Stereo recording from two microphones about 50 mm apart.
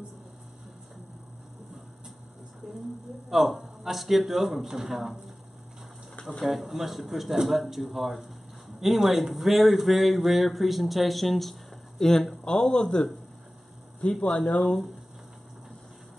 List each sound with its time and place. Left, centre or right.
3.3 s speech: centre
6.4 s a man's voice: centre
14.2 s a man's voice: centre